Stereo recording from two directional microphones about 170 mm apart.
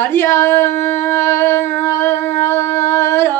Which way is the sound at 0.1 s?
15° left (ahead or behind).